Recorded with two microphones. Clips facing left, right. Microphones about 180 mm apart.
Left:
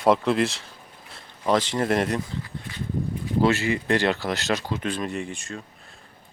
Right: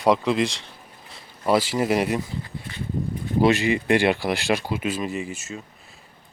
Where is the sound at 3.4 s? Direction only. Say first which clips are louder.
Right 3 dB; 15° right (ahead or behind).